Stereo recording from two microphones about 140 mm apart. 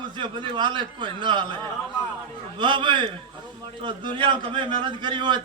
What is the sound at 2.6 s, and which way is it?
A man's voice, 35° right (ahead or behind).